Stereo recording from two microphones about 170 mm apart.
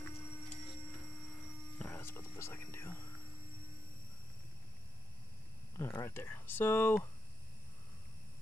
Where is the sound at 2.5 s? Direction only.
10° left (ahead or behind).